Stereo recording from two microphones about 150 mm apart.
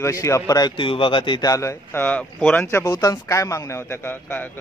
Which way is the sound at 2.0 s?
10° left (ahead or behind).